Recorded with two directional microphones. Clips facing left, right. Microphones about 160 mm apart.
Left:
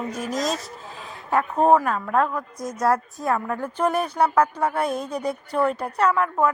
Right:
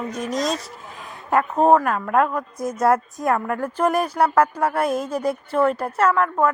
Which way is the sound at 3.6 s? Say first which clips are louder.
Right 3 dB; 10° right (ahead or behind).